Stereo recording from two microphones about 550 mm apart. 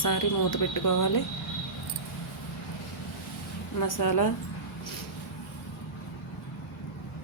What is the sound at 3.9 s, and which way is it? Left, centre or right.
Speech, left.